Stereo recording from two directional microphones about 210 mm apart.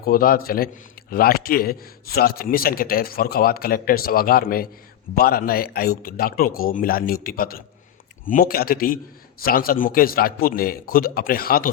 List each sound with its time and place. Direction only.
0.0 s a man's voice: 45° left (ahead or behind)